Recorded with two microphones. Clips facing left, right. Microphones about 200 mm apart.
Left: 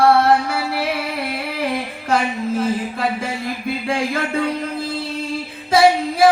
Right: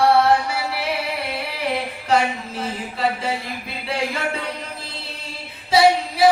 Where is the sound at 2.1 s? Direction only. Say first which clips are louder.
Left 2 dB; 50° left (ahead or behind).